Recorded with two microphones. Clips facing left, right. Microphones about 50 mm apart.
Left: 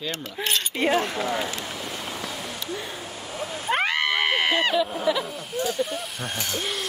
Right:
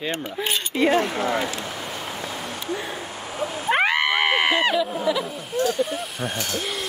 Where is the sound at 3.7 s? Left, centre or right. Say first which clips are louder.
Right 3 dB; right.